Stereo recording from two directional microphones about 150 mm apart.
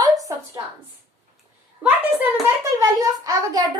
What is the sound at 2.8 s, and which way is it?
Speech, 25° right (ahead or behind).